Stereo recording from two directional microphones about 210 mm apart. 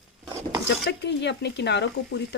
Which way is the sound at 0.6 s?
55° left (ahead or behind).